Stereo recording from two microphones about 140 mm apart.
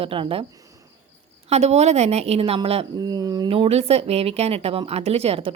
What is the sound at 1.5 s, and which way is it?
Speech, 50° right (ahead or behind).